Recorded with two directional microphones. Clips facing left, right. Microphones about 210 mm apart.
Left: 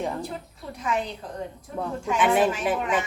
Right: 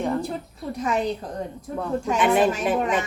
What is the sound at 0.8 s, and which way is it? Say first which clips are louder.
Speech: right 4 dB; 40° right (ahead or behind).